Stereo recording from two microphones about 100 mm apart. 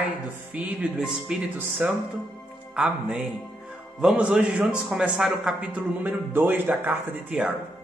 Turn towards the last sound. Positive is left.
turn(degrees=-10)  # may be behind; listen again after turning